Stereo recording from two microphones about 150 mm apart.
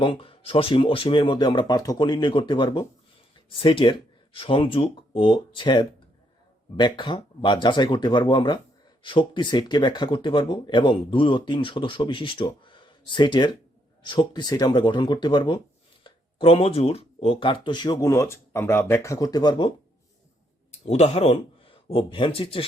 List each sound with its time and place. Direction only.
0.0 s speech: 35° left (ahead or behind)
20.7 s speech: 45° left (ahead or behind)